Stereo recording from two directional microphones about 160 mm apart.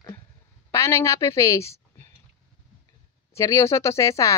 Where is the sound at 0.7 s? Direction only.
15° left (ahead or behind).